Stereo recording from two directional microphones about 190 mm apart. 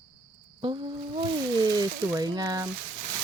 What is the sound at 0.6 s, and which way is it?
Speech, 25° right (ahead or behind).